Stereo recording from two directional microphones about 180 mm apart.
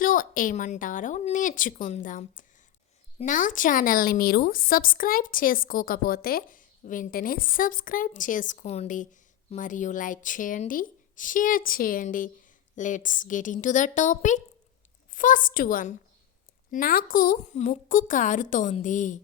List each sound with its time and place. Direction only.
0.0 s speech: 50° left (ahead or behind)